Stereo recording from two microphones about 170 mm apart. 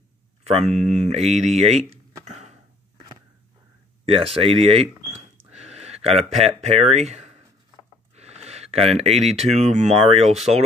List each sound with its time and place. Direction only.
0.4 s speech: 40° right (ahead or behind)
4.1 s speech: 35° right (ahead or behind)